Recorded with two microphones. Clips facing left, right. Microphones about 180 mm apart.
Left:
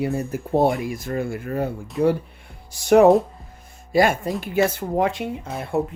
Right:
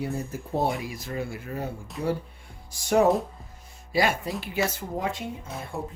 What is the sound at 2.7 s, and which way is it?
Speech, 70° left (ahead or behind).